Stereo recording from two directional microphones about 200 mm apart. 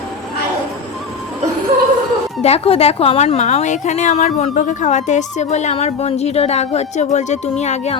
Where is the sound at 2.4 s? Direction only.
30° left (ahead or behind).